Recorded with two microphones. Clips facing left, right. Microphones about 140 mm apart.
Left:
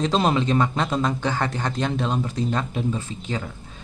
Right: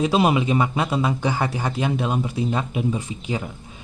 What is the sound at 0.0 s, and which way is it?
Speech, 10° right (ahead or behind).